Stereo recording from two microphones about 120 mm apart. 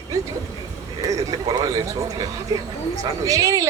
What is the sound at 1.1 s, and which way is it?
Speech, 30° right (ahead or behind).